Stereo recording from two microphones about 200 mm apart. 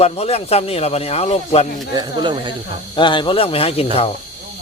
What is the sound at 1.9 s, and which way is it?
Speech, 20° right (ahead or behind).